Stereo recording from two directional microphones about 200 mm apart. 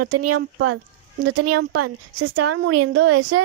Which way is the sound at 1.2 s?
65° right (ahead or behind).